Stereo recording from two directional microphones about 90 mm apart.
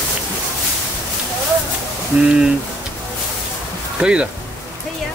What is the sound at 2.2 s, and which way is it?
Speech, 10° right (ahead or behind).